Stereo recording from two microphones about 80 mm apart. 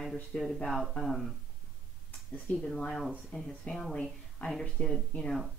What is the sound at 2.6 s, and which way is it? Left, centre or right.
Speech, centre.